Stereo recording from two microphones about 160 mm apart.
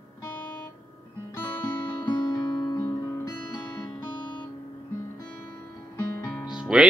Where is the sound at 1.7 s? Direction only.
10° left (ahead or behind).